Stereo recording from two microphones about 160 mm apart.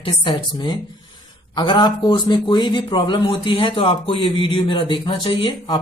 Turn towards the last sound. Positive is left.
turn(degrees=30)  # may be behind; listen again after turning